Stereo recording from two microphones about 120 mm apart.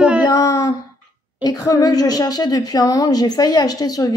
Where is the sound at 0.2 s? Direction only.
30° left (ahead or behind).